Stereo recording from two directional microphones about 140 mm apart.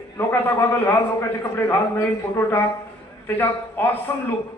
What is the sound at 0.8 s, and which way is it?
A man's voice, 20° left (ahead or behind).